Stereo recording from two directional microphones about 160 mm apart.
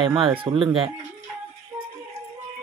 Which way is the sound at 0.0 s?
30° right (ahead or behind).